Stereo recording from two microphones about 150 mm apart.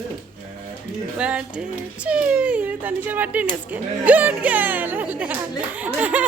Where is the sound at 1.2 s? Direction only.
5° right (ahead or behind).